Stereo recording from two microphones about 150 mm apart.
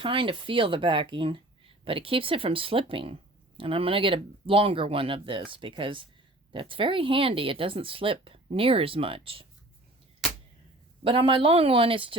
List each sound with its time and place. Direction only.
0.0 s speech: 35° right (ahead or behind)
11.0 s speech: 35° right (ahead or behind)